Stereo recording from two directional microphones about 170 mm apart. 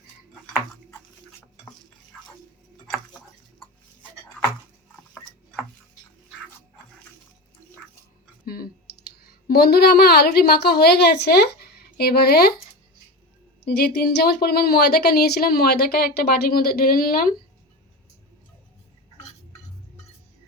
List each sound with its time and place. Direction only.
8.4 s clicking: 60° left (ahead or behind)
9.5 s a woman's voice: 70° left (ahead or behind)
13.7 s speech: 70° left (ahead or behind)